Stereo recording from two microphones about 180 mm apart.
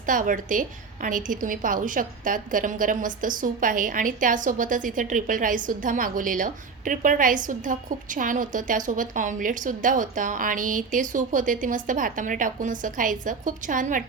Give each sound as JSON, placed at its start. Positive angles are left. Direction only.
{"t": 0.0, "sound": "a woman's voice", "side_deg": -45}